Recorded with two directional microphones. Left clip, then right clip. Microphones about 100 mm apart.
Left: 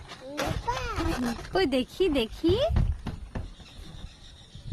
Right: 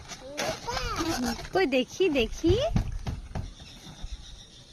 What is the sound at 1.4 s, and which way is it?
Speech, 5° left (ahead or behind).